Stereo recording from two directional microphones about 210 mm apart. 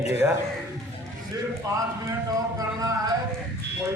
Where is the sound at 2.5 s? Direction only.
15° right (ahead or behind).